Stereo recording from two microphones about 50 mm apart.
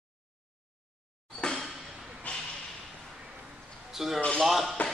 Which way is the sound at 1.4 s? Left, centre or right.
Left.